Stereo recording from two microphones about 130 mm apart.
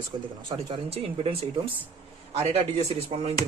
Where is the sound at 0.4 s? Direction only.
40° right (ahead or behind).